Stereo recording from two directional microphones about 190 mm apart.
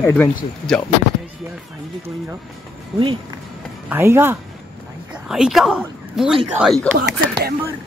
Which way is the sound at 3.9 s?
10° right (ahead or behind).